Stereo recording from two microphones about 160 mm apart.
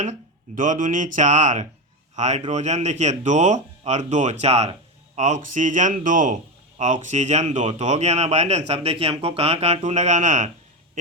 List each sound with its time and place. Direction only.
0.0 s a man's voice: 50° right (ahead or behind)